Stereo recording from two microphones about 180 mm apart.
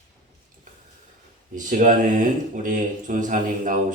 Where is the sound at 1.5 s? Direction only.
45° right (ahead or behind).